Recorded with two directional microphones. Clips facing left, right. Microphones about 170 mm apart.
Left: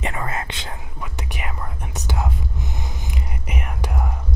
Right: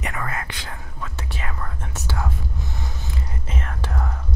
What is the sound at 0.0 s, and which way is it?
Whispering, 25° left (ahead or behind).